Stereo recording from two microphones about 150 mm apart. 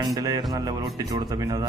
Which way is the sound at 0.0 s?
25° right (ahead or behind).